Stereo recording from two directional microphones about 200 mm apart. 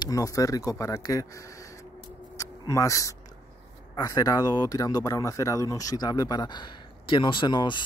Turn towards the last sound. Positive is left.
turn(degrees=20)  # may be behind; listen again after turning